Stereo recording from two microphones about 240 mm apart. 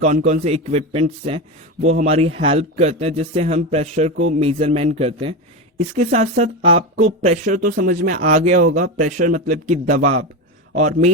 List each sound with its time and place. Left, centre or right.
0.0 s a man's voice: right